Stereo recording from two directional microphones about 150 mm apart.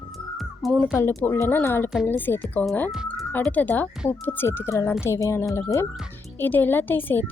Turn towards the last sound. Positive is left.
turn(degrees=15)  # may be behind; listen again after turning